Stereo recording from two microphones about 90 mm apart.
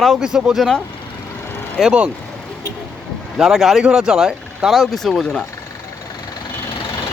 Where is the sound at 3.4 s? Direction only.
5° right (ahead or behind).